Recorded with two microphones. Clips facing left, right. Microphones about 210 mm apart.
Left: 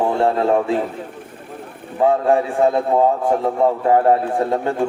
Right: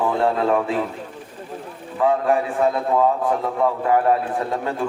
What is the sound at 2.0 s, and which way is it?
A man's voice, 30° left (ahead or behind).